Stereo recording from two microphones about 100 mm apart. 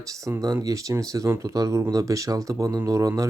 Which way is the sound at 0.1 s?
35° right (ahead or behind).